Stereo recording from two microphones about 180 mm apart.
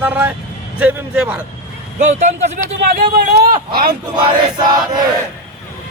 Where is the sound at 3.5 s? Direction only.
50° right (ahead or behind).